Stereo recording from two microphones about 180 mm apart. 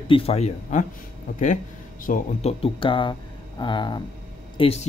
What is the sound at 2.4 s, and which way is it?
Speech, 35° left (ahead or behind).